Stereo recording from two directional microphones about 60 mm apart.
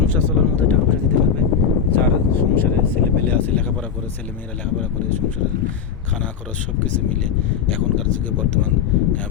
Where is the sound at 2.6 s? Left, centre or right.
Left.